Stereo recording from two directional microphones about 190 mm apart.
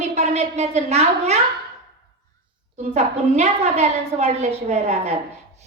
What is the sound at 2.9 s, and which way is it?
A child's voice, 35° right (ahead or behind).